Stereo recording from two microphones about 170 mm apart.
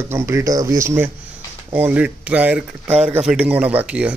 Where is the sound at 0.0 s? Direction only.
15° right (ahead or behind).